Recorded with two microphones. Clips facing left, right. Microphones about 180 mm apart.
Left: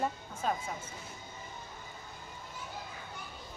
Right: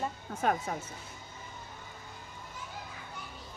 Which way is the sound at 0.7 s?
65° right (ahead or behind).